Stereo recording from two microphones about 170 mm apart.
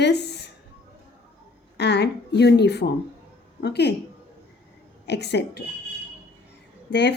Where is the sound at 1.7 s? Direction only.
85° left.